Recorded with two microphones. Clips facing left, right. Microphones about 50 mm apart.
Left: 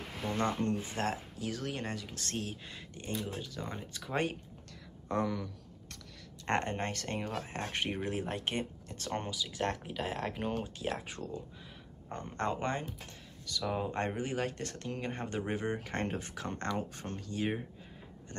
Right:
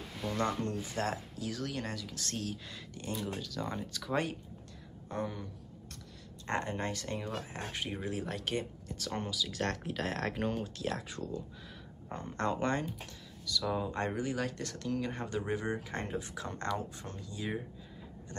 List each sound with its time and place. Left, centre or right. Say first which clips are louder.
0.6 s speech: left 2 dB; left
5.0 s a sound: left 5 dB; left
6.4 s speech: left 2 dB; left
8.8 s speech: right 1 dB; left
9.1 s speech: even; left; by 10.6 s centre
10.6 s speech: even; left
11.1 s speech: right 1 dB; left
15.9 s speech: left 1 dB; left
18.3 s a sound: left 1 dB; left